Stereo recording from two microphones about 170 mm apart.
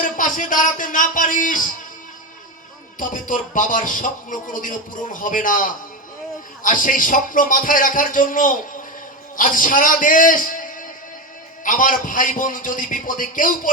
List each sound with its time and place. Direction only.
0.0 s speech: 50° left (ahead or behind)
3.0 s a man's voice: 55° left (ahead or behind)